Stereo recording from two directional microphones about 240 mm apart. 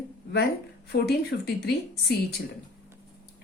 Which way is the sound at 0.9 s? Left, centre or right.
Left.